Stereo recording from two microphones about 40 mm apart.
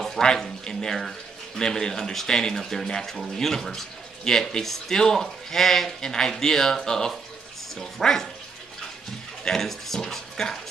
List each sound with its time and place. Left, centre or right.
0.2 s speech: centre
0.9 s a sound: centre
1.6 s speech: centre
5.9 s speech: centre
9.4 s speech: centre